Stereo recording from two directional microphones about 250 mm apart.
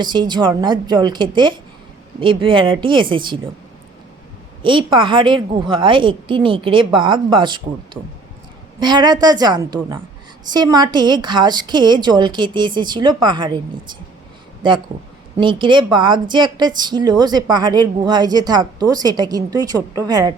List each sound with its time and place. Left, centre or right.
0.0 s a woman's voice: centre
4.6 s a woman's voice: centre
8.8 s a woman's voice: centre
14.6 s a woman's voice: centre